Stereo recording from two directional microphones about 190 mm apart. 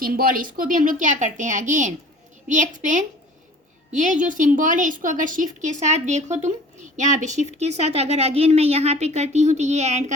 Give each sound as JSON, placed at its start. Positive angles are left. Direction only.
{"t": 0.0, "sound": "a woman's voice", "side_deg": -50}